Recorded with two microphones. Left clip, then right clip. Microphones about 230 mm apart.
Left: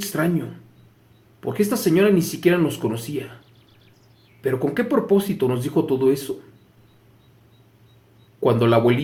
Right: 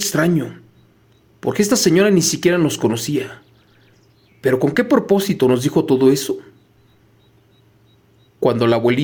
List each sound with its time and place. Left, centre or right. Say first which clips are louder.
0.0 s speech: right 6 dB; right
4.4 s speech: right 6 dB; right
8.4 s speech: right 2 dB; right